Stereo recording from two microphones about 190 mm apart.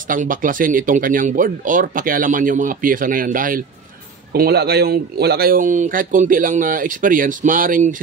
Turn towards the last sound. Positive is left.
turn(degrees=-45)  # may be behind; listen again after turning